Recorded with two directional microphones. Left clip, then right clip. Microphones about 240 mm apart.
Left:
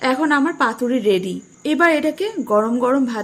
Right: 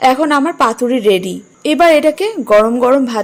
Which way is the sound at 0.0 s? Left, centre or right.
Centre.